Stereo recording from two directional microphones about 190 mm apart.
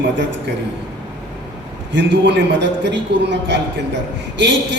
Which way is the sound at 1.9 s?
65° right (ahead or behind).